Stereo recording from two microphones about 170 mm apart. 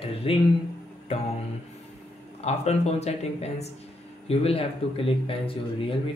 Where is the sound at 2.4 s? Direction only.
40° left (ahead or behind).